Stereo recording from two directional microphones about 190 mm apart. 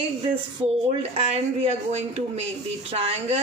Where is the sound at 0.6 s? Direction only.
15° right (ahead or behind).